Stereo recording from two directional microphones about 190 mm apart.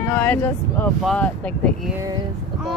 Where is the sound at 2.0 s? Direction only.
20° right (ahead or behind).